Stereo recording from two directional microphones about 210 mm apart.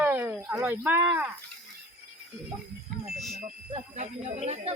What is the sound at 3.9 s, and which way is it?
Speech, 35° right (ahead or behind).